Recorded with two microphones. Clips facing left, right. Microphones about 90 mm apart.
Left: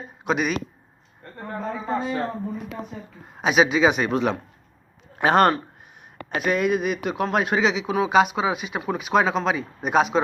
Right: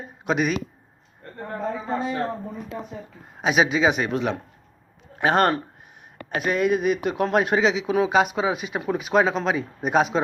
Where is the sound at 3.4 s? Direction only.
25° right (ahead or behind).